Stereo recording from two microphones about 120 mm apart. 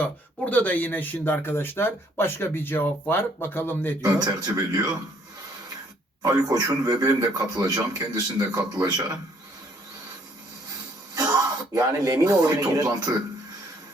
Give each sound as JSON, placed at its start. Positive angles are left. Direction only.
{"t": 0.0, "sound": "speech", "side_deg": 15}
{"t": 4.0, "sound": "a man's voice", "side_deg": -30}
{"t": 6.2, "sound": "a man's voice", "side_deg": -30}
{"t": 11.1, "sound": "speech", "side_deg": -30}